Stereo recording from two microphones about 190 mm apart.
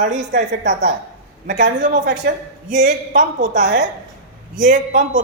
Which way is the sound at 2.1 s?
45° right (ahead or behind).